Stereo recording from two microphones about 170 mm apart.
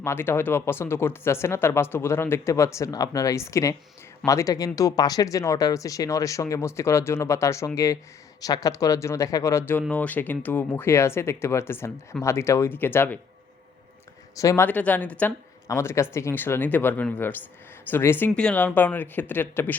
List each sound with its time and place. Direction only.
0.0 s speech: 15° left (ahead or behind)
14.3 s speech: 15° left (ahead or behind)